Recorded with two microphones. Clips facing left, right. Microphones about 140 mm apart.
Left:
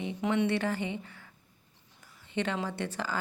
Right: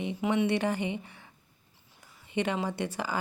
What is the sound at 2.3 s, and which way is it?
Speech, 10° right (ahead or behind).